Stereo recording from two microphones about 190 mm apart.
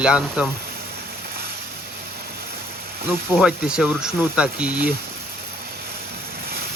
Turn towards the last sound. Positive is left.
turn(degrees=-5)  # may be behind; listen again after turning